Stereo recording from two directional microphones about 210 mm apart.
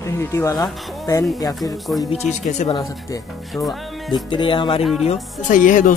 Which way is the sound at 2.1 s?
30° left (ahead or behind).